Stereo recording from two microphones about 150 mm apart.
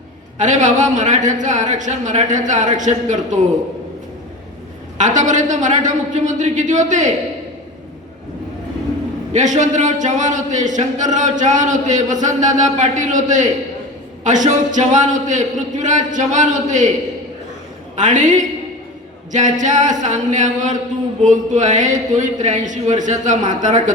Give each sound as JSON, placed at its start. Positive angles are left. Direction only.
{"t": 0.3, "sound": "speech", "side_deg": -55}
{"t": 4.9, "sound": "speech", "side_deg": -55}
{"t": 9.3, "sound": "speech", "side_deg": -55}
{"t": 17.9, "sound": "speech", "side_deg": -55}